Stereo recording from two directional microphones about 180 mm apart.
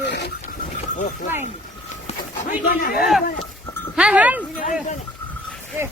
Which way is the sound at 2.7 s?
55° left (ahead or behind).